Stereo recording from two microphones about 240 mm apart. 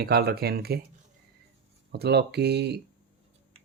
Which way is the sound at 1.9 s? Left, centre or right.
Right.